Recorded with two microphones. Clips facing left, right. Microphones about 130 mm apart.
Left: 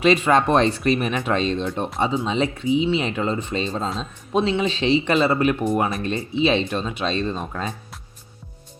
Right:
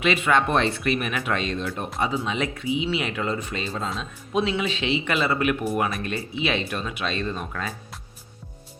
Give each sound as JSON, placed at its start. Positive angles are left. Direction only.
{"t": 0.0, "sound": "speech", "side_deg": 35}